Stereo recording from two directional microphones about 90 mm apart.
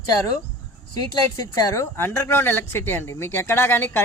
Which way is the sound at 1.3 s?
40° left (ahead or behind).